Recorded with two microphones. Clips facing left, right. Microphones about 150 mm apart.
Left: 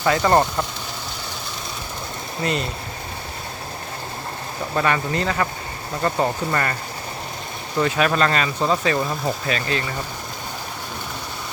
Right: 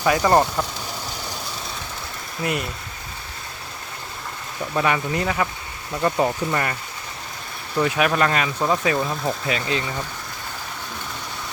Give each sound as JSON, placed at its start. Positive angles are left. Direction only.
{"t": 0.0, "sound": "speech", "side_deg": -10}
{"t": 2.4, "sound": "speech", "side_deg": -10}
{"t": 4.7, "sound": "speech", "side_deg": -10}
{"t": 7.8, "sound": "speech", "side_deg": -10}
{"t": 9.5, "sound": "speech", "side_deg": -15}